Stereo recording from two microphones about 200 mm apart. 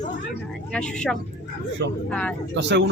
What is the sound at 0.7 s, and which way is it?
Speech, 5° left (ahead or behind).